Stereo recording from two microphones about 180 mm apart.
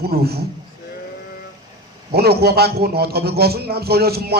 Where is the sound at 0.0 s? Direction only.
60° right (ahead or behind).